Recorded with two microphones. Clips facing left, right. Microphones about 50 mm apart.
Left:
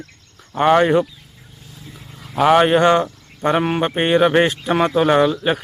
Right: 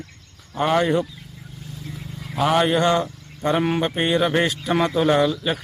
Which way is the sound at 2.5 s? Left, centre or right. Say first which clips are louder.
Left 3 dB; left.